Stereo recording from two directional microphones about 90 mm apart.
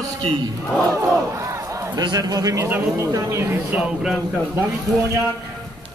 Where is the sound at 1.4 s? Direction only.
35° right (ahead or behind).